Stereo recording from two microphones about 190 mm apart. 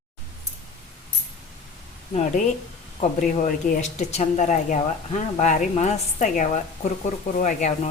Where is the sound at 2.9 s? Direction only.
40° left (ahead or behind).